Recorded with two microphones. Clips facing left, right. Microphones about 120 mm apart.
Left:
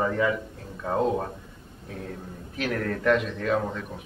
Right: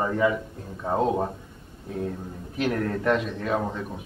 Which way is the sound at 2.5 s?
25° right (ahead or behind).